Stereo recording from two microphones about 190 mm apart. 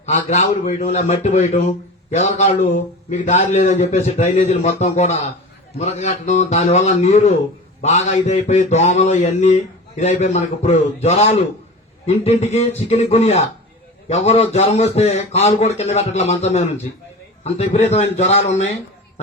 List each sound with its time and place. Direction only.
0.0 s a man's voice: 35° left (ahead or behind)